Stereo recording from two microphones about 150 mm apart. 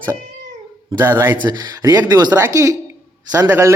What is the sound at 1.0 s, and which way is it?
Speech, 15° right (ahead or behind).